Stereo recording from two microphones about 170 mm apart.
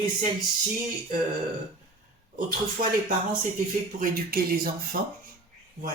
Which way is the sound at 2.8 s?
55° right (ahead or behind).